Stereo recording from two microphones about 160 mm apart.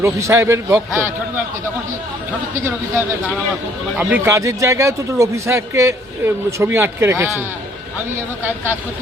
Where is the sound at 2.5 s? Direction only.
15° right (ahead or behind).